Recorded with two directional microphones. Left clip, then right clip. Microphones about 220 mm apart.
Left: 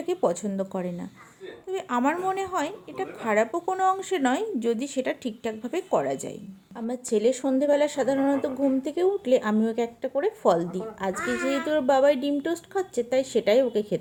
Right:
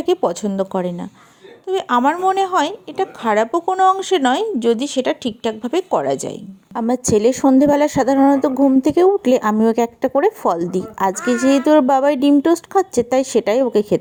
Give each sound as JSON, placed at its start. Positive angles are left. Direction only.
{"t": 0.0, "sound": "a woman's voice", "side_deg": -25}
{"t": 6.7, "sound": "speech", "side_deg": -40}